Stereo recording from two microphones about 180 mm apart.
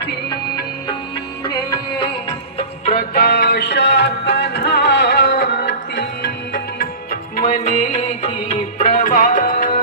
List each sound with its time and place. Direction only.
0.0 s music: 65° left (ahead or behind)
2.6 s music: 35° left (ahead or behind)
3.2 s music: 60° left (ahead or behind)
7.1 s music: 55° left (ahead or behind)
7.7 s music: 40° left (ahead or behind)